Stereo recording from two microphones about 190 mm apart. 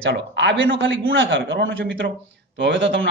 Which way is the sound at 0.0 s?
65° right (ahead or behind).